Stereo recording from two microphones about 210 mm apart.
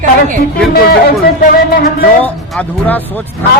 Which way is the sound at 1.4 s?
45° left (ahead or behind).